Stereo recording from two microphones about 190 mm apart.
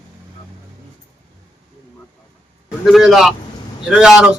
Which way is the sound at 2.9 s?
Centre (ahead or behind).